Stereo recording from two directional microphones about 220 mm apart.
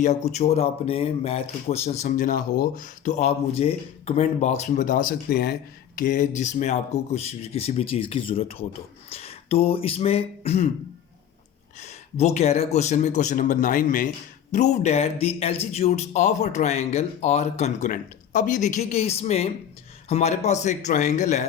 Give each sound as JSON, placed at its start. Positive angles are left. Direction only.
{"t": 0.0, "sound": "speech", "side_deg": 30}
{"t": 11.8, "sound": "speech", "side_deg": 30}